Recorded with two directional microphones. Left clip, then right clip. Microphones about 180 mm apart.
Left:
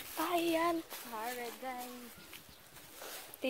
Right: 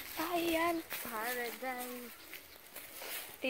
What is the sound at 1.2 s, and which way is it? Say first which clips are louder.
Speech: right 2 dB; 25° right (ahead or behind).